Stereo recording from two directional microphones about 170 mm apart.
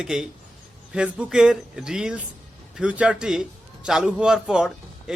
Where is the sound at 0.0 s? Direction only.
5° right (ahead or behind).